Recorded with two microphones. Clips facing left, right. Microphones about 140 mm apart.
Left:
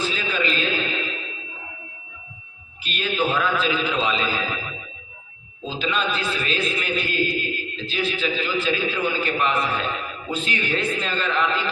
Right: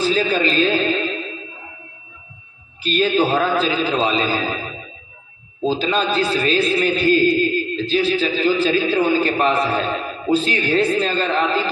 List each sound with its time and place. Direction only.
0.0 s music: 35° right (ahead or behind)
2.8 s a man's voice: 35° right (ahead or behind)